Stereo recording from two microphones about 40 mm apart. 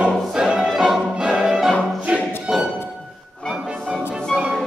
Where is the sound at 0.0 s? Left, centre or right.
Right.